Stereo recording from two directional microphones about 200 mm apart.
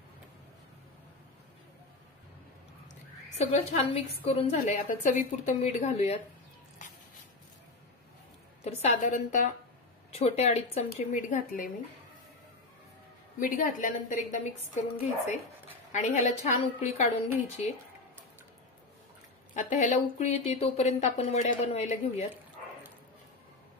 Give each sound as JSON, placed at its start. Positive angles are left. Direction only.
{"t": 3.3, "sound": "a woman's voice", "side_deg": 30}
{"t": 8.6, "sound": "a woman's voice", "side_deg": 35}
{"t": 13.4, "sound": "a woman's voice", "side_deg": 40}
{"t": 19.5, "sound": "a woman's voice", "side_deg": 40}